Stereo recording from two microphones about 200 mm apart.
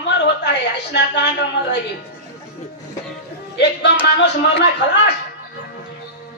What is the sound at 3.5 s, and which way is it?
A man's voice, 60° left (ahead or behind).